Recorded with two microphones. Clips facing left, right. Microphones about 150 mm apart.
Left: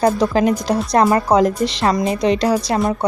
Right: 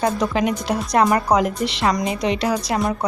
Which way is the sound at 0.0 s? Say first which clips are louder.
Left 5 dB; 35° left (ahead or behind).